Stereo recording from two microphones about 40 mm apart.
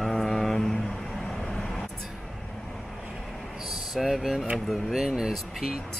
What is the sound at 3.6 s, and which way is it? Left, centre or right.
Speech, centre.